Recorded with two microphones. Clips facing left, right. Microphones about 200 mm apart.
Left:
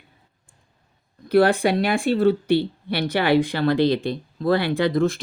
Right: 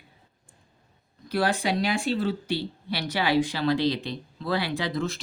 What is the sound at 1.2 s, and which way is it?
Speech, 60° left (ahead or behind).